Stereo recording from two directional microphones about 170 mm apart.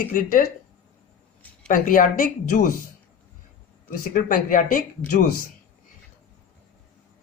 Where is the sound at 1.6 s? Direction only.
50° left (ahead or behind).